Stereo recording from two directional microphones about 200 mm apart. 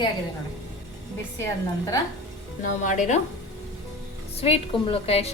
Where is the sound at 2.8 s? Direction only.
40° left (ahead or behind).